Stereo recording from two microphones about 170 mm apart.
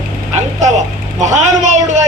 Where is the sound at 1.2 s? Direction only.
45° right (ahead or behind).